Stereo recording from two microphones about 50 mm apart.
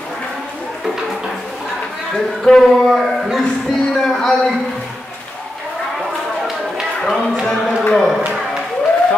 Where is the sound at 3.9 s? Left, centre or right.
Centre.